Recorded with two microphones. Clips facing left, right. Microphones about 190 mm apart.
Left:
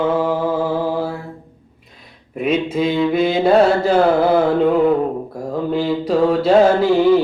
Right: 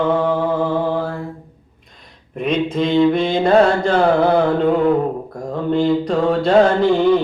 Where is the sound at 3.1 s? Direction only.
5° left (ahead or behind).